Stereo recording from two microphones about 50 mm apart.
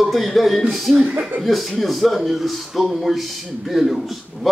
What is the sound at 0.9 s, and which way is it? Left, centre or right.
Speech, right.